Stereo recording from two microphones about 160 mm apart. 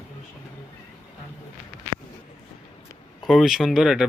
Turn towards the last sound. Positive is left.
turn(degrees=-5)  # may be behind; listen again after turning